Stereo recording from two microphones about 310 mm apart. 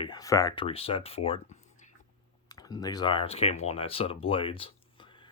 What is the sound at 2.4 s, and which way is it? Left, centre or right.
Speech, centre.